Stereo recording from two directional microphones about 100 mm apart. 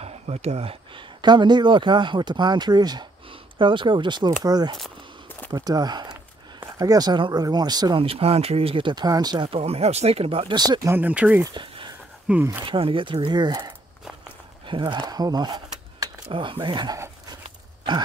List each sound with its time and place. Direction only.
0.0 s speech: 90° right
1.2 s speech: 50° right (ahead or behind)
3.5 s speech: 55° right (ahead or behind)
8.0 s speech: 75° right (ahead or behind); by 9.0 s 60° right (ahead or behind)
9.0 s speech: 40° right (ahead or behind)
9.5 s speech: 90° right; by 10.5 s 70° right (ahead or behind)
10.5 s speech: 40° right (ahead or behind)
10.9 s speech: 15° right (ahead or behind)
11.4 s a sound: 55° right (ahead or behind)
12.3 s speech: 10° right (ahead or behind)
12.6 s speech: 60° right (ahead or behind)
15.0 s a sound: 40° right (ahead or behind)
16.5 s speech: 50° right (ahead or behind)